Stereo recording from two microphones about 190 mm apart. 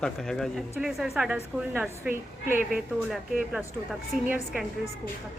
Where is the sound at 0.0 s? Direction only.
Centre (ahead or behind).